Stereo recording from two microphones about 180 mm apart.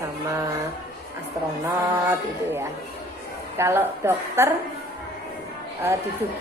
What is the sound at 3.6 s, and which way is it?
Speech, 15° right (ahead or behind).